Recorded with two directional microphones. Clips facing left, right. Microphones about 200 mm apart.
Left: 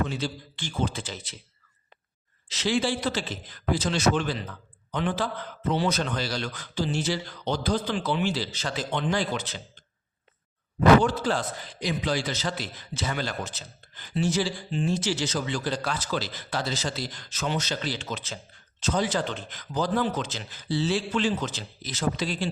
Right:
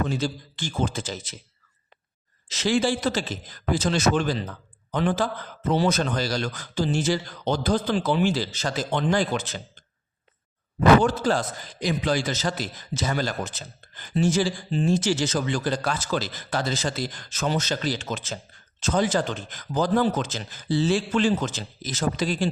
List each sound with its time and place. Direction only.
0.1 s a man's voice: 45° right (ahead or behind)
2.5 s a man's voice: 45° right (ahead or behind)
11.0 s a man's voice: 45° right (ahead or behind)